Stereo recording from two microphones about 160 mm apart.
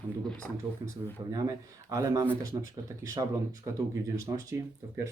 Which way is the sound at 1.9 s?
20° right (ahead or behind).